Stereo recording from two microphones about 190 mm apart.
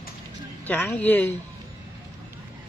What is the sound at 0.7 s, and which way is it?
Speech, 10° left (ahead or behind).